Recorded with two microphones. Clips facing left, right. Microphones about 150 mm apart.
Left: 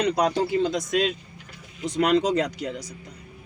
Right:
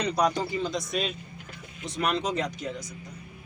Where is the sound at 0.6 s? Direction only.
90° left.